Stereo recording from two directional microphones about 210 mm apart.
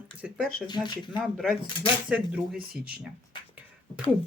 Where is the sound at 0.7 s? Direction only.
20° left (ahead or behind).